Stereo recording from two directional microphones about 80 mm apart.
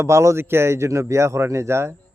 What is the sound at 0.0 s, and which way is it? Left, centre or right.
A man's voice, right.